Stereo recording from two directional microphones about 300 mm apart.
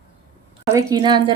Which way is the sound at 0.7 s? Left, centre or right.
Centre.